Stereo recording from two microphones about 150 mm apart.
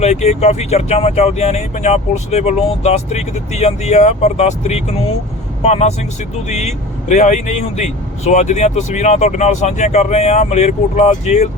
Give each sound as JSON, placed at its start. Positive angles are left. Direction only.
{"t": 0.0, "sound": "speech", "side_deg": 45}